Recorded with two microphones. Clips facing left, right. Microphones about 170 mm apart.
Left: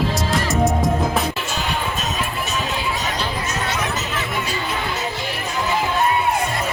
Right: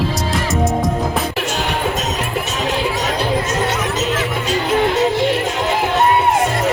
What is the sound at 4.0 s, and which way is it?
Music, 90° right.